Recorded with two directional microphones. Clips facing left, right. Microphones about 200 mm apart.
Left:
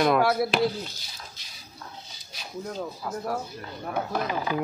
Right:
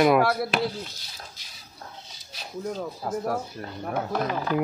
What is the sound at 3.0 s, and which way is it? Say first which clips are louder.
Speech: right 4 dB; 40° right (ahead or behind).